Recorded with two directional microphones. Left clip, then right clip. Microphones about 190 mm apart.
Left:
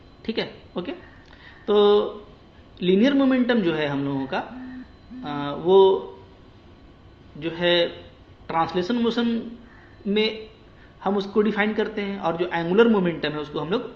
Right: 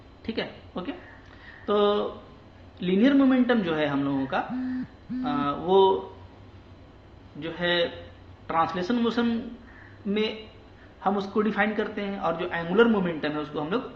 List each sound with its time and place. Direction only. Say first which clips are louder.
0.3 s a man's voice: left 4 dB; 35° left (ahead or behind)
7.3 s a man's voice: left 5 dB; 30° left (ahead or behind)